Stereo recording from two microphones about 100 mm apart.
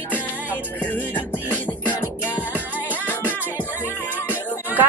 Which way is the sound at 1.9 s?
15° right (ahead or behind).